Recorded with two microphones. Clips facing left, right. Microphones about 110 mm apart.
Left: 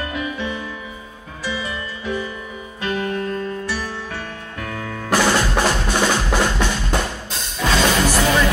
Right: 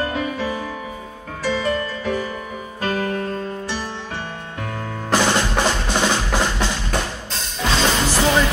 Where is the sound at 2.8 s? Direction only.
40° right (ahead or behind).